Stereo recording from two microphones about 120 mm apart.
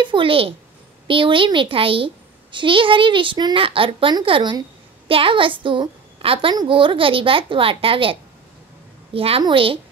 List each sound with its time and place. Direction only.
0.0 s speech: 45° right (ahead or behind)